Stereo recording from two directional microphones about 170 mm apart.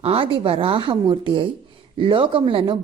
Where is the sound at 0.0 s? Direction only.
35° right (ahead or behind).